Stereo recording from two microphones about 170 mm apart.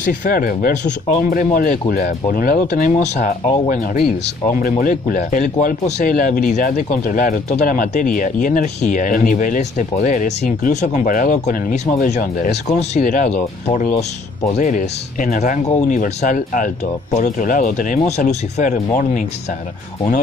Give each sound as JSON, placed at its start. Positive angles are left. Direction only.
{"t": 0.0, "sound": "speech", "side_deg": 55}
{"t": 12.0, "sound": "speech", "side_deg": 50}